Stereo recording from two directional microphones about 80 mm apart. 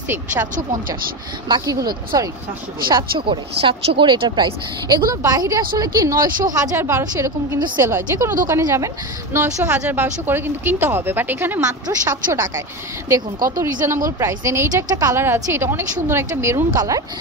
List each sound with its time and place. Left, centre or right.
1.5 s a woman's voice: right
2.9 s a woman's voice: right
6.8 s a woman's voice: right
11.6 s a woman's voice: right
15.1 s a woman's voice: right